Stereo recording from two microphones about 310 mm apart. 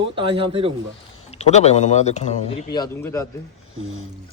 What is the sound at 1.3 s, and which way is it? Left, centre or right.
A man's voice, left.